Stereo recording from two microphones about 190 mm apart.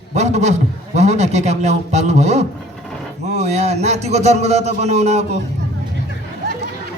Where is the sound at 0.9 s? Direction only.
35° right (ahead or behind).